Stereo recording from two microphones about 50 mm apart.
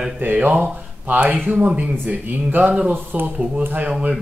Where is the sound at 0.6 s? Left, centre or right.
Right.